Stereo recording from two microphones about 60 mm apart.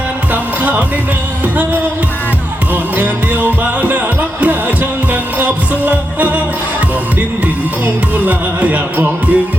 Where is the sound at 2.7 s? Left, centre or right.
Right.